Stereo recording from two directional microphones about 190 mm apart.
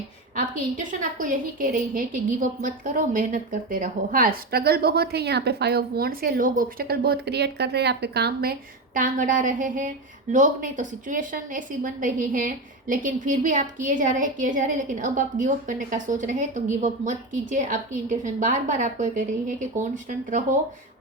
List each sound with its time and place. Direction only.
0.3 s a woman's voice: 45° right (ahead or behind)
9.0 s a woman's voice: 45° right (ahead or behind)